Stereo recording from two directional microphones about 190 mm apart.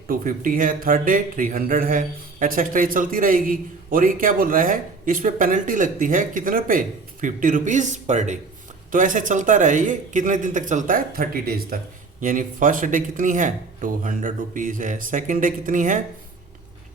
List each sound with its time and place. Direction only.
0.1 s a man's voice: 45° right (ahead or behind)